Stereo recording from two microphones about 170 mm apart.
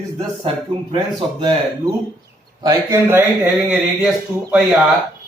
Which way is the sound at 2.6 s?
15° right (ahead or behind).